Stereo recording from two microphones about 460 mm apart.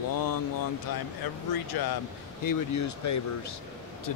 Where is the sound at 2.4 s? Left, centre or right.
Left.